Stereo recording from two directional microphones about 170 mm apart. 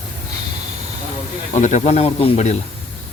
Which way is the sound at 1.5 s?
45° left (ahead or behind).